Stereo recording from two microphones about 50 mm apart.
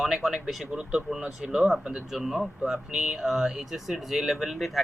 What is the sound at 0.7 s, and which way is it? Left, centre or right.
Speech, centre.